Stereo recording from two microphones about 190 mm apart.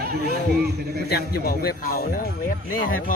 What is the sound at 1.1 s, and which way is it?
Speech, 55° left (ahead or behind).